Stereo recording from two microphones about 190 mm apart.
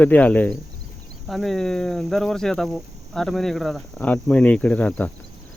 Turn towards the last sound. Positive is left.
turn(degrees=5)  # may be behind; listen again after turning